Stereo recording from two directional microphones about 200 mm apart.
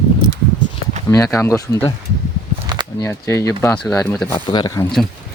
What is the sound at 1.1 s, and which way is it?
Speech, 15° left (ahead or behind).